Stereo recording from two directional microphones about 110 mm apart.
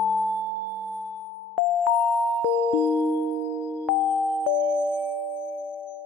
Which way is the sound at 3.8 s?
Centre (ahead or behind).